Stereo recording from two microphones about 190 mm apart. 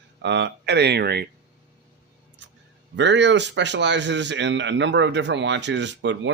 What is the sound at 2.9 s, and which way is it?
Speech, 70° right (ahead or behind).